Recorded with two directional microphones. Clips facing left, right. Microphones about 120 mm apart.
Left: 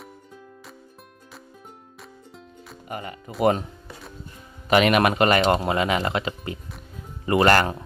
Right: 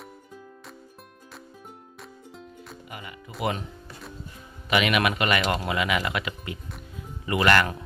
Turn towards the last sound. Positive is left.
turn(degrees=35)  # may be behind; listen again after turning